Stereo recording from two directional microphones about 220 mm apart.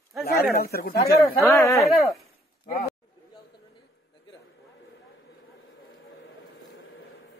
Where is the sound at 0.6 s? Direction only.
45° left (ahead or behind).